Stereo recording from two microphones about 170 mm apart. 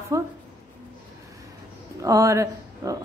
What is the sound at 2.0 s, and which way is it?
Speech, 20° right (ahead or behind).